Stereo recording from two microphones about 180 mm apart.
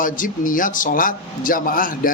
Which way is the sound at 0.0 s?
50° left (ahead or behind).